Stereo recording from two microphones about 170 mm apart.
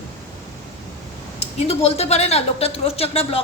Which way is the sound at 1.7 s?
35° left (ahead or behind).